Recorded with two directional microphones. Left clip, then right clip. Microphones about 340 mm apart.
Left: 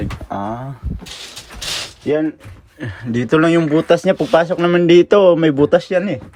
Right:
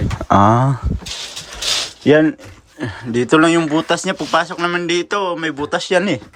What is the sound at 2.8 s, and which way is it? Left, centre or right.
Speech, centre.